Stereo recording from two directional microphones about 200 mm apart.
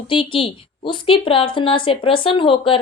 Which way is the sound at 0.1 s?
25° left (ahead or behind).